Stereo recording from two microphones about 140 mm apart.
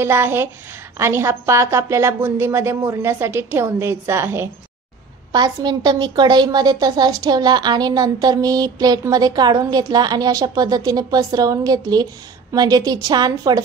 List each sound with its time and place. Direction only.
0.0 s a woman's voice: 15° right (ahead or behind)
5.3 s a woman's voice: 30° right (ahead or behind)